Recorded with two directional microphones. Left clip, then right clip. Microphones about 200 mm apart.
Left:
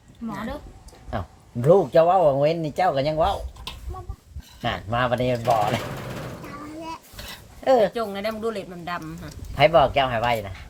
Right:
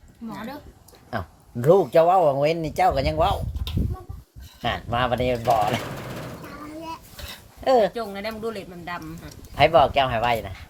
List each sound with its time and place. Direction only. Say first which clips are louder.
0.3 s speech: left 3 dB; 15° right (ahead or behind)
1.6 s speech: even; 20° right (ahead or behind)
4.6 s speech: even; 20° right (ahead or behind)
7.6 s speech: even; 25° right (ahead or behind)
7.9 s speech: left 3 dB; 30° left (ahead or behind)
9.6 s speech: even; 25° right (ahead or behind)